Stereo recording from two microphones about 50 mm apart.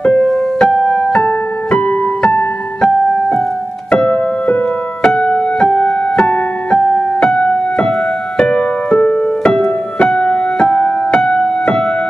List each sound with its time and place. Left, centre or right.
0.0 s keyboard: centre
2.8 s music: centre